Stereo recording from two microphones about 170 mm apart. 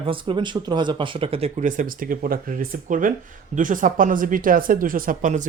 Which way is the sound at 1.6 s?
50° right (ahead or behind).